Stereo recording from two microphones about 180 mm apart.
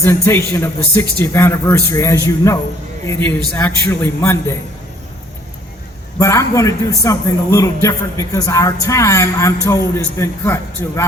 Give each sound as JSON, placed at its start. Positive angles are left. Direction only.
{"t": 0.0, "sound": "a man's voice", "side_deg": 15}
{"t": 6.1, "sound": "a man's voice", "side_deg": 15}